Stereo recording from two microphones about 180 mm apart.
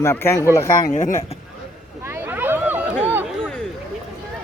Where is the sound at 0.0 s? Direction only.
15° left (ahead or behind).